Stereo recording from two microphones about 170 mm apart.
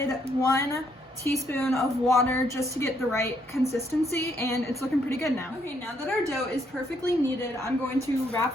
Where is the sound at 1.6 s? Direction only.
Centre (ahead or behind).